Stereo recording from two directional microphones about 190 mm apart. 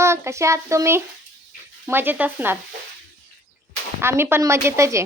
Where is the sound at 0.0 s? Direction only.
15° right (ahead or behind).